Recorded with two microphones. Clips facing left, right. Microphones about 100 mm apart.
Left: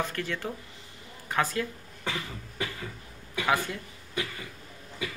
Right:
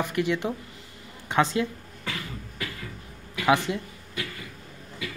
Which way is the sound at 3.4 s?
20° right (ahead or behind).